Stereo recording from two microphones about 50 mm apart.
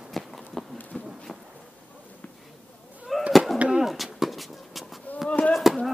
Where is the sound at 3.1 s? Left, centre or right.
Centre.